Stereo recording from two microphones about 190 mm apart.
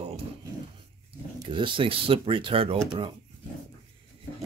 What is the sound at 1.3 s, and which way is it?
Speech, 25° right (ahead or behind).